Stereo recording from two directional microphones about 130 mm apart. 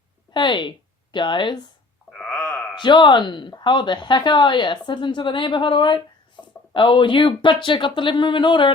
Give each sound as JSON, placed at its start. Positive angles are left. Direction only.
{"t": 0.3, "sound": "speech", "side_deg": 35}
{"t": 2.1, "sound": "wail", "side_deg": 10}
{"t": 2.7, "sound": "speech", "side_deg": 35}